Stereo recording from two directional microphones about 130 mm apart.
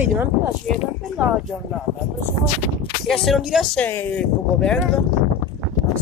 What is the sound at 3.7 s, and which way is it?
Speech, 10° left (ahead or behind).